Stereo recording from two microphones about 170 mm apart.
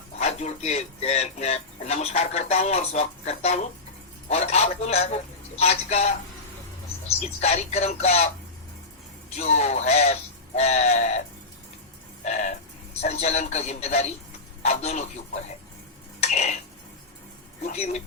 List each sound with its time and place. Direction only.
0.2 s speech: 40° left (ahead or behind)
7.2 s speech: 40° left (ahead or behind)
9.3 s speech: 40° left (ahead or behind)
12.2 s music: 45° left (ahead or behind)
13.0 s speech: 40° left (ahead or behind)
16.2 s a sound: 40° left (ahead or behind)
17.6 s speech: 40° left (ahead or behind)